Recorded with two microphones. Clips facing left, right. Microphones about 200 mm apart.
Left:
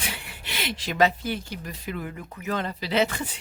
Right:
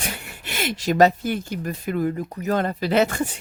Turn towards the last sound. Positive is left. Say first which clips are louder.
# right 5 dB
turn(degrees=-45)  # may be behind; listen again after turning